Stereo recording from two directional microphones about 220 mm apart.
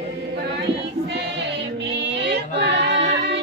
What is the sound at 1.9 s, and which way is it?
Music, 50° right (ahead or behind).